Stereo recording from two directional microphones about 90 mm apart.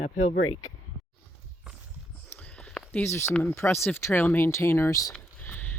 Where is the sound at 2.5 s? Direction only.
10° left (ahead or behind).